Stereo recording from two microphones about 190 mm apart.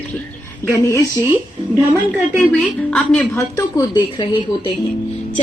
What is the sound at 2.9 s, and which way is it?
A woman's voice, 10° left (ahead or behind).